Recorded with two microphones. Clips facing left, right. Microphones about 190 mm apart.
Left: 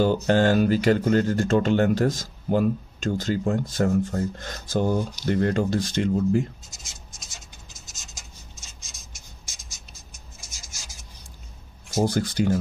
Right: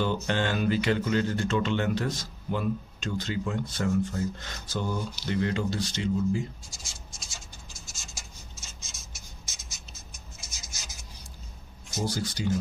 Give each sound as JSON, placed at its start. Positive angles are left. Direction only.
{"t": 0.0, "sound": "speech", "side_deg": 40}
{"t": 6.7, "sound": "scratch", "side_deg": 20}
{"t": 12.0, "sound": "speech", "side_deg": 55}